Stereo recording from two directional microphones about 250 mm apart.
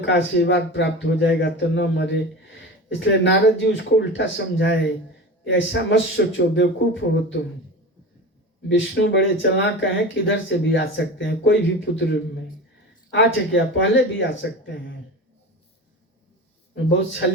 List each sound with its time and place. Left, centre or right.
0.0 s a man's voice: left
8.7 s a man's voice: left
16.7 s a man's voice: left